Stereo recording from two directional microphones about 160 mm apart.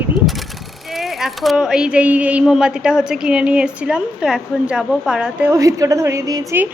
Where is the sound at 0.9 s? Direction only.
Centre (ahead or behind).